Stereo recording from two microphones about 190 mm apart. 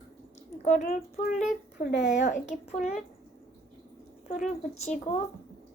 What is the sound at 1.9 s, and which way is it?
Speech, 65° left (ahead or behind).